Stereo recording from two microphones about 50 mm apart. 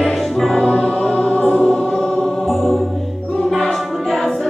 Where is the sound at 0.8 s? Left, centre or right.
Left.